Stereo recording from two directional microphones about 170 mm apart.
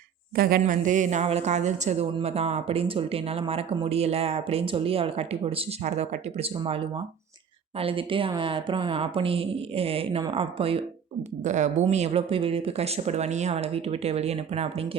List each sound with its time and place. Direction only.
0.3 s speech: 60° right (ahead or behind)
0.6 s a woman's voice: 45° right (ahead or behind)
11.4 s speech: 45° right (ahead or behind)